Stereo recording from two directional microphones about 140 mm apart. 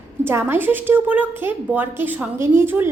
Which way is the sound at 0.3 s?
15° right (ahead or behind).